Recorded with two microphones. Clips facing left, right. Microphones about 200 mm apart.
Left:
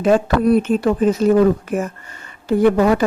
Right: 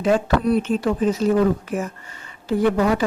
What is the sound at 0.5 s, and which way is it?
Speech, 50° left (ahead or behind).